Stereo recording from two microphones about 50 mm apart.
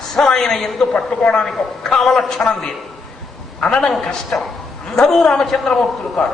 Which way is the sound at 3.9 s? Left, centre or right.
Centre.